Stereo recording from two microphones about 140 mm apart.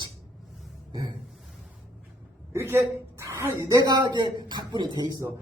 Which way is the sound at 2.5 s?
20° right (ahead or behind).